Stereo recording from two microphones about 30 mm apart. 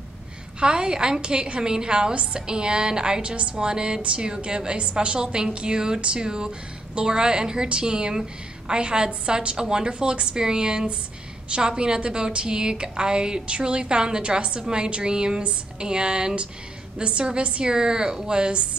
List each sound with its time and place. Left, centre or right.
0.6 s speech: right
3.2 s a woman's voice: right
3.5 s a woman's voice: right
17.6 s speech: right